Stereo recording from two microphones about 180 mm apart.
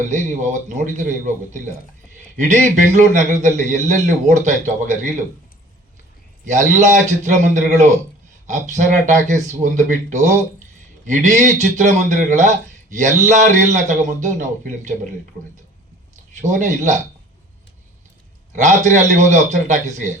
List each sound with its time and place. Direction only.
0.0 s a man's voice: 45° right (ahead or behind)
6.4 s a man's voice: 45° right (ahead or behind)
16.4 s a man's voice: 45° right (ahead or behind)
18.5 s a man's voice: 45° right (ahead or behind)